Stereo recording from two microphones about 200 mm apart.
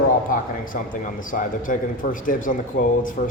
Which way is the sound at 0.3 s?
45° left (ahead or behind).